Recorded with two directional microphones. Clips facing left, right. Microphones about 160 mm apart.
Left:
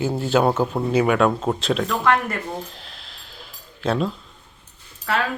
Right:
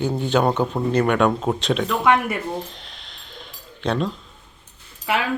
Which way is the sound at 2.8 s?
Centre (ahead or behind).